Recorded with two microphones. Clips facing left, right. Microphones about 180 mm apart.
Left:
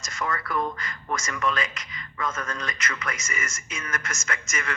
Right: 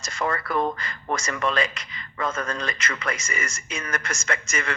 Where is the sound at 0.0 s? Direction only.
30° right (ahead or behind).